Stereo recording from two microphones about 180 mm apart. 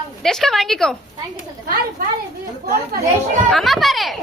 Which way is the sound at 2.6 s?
55° right (ahead or behind).